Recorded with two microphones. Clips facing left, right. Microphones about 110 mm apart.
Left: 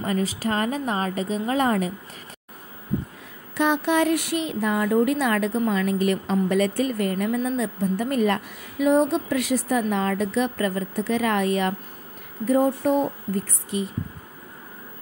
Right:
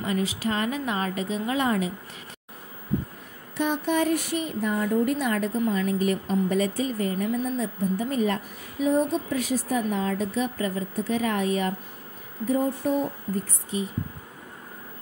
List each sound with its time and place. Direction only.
0.0 s a woman's voice: 40° left (ahead or behind)
3.5 s a woman's voice: 90° left
12.4 s speech: 70° left (ahead or behind)